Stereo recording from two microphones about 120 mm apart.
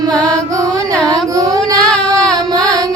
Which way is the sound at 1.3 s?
30° right (ahead or behind).